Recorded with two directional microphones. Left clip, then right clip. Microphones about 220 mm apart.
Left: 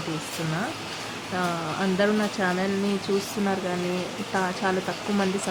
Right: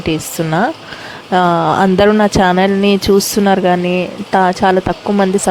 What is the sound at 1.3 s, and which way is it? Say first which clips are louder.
Speech: right 17 dB; 45° right (ahead or behind).